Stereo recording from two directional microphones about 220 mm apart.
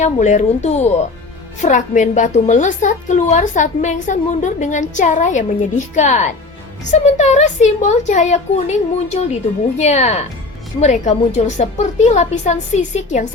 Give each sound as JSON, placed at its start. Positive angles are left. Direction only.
{"t": 0.0, "sound": "a woman's voice", "side_deg": 35}